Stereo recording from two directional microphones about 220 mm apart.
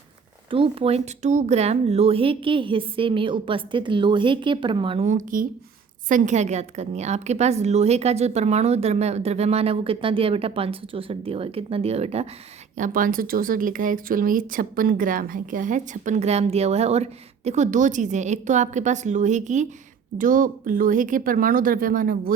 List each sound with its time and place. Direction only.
0.5 s a woman's voice: 25° right (ahead or behind); by 22.4 s 40° right (ahead or behind)